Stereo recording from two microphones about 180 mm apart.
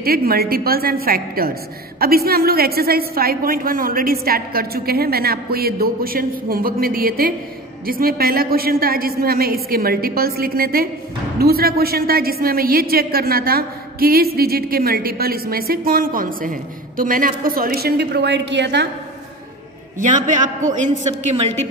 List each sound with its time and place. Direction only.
0.0 s a woman's voice: 55° right (ahead or behind); by 18.9 s 75° right (ahead or behind)
20.0 s a man's voice: 45° right (ahead or behind)